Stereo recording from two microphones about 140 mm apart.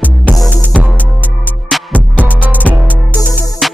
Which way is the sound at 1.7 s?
Centre (ahead or behind).